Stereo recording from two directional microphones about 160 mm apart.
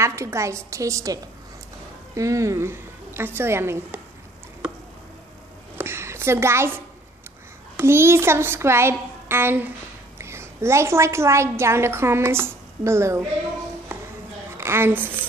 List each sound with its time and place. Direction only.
0.0 s a child's voice: 15° right (ahead or behind)
5.8 s a sound: 15° right (ahead or behind)
7.7 s a child's voice: 15° right (ahead or behind)
14.6 s a woman's voice: 15° right (ahead or behind)